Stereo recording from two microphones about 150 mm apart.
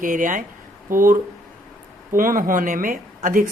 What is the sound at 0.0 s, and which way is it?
Speech, 60° right (ahead or behind).